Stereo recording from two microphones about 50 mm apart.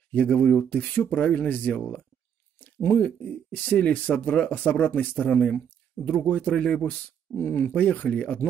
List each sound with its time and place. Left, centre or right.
0.1 s speech: left
2.6 s a sound: left
3.0 s speech: left
7.3 s speech: left